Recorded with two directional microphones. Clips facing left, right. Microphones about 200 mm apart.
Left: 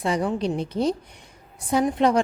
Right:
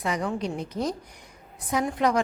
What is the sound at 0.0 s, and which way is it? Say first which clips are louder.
A woman's voice: left 4 dB; 30° left (ahead or behind).